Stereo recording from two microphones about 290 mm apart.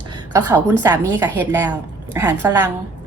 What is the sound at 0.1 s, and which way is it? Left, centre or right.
A woman's voice, centre.